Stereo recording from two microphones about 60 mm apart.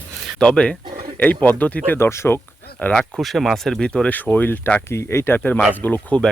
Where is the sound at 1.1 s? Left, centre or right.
Left.